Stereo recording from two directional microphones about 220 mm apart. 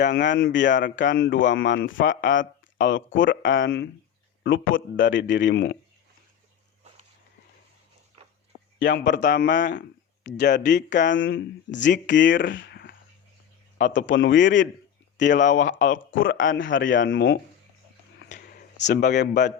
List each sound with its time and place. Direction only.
0.1 s speech: 55° left (ahead or behind)
8.8 s speech: 55° left (ahead or behind)
9.1 s speech: 35° left (ahead or behind)
10.7 s speech: 55° left (ahead or behind)
15.4 s speech: 35° left (ahead or behind)
16.4 s speech: 60° left (ahead or behind)
18.2 s a sound: 50° left (ahead or behind)
19.1 s a man's voice: 50° left (ahead or behind)